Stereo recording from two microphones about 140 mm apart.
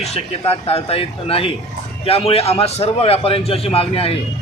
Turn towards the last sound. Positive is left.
turn(degrees=45)  # may be behind; listen again after turning